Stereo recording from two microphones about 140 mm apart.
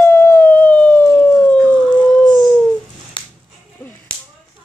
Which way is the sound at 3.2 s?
35° left (ahead or behind).